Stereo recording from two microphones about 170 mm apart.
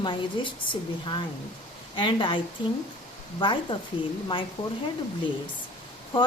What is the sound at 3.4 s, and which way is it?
A woman's voice, 30° left (ahead or behind).